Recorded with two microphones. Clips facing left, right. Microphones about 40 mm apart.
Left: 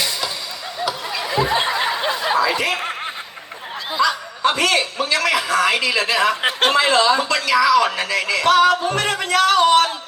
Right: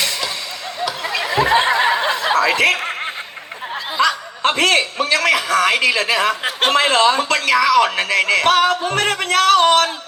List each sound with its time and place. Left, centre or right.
1.0 s snicker: right
4.0 s a man's voice: right